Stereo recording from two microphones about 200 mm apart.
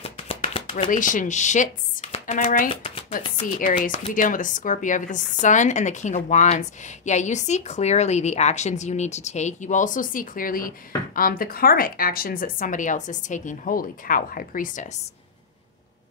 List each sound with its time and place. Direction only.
0.0 s a sound: 30° left (ahead or behind)
0.8 s speech: 40° left (ahead or behind)
2.3 s a woman's voice: 45° left (ahead or behind)
2.7 s speech: 25° left (ahead or behind)
3.5 s a woman's voice: 40° left (ahead or behind)